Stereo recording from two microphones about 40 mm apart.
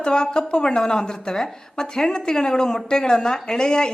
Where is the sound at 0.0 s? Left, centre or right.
Left.